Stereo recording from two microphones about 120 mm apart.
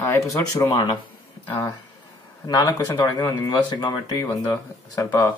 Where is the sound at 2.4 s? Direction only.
35° left (ahead or behind).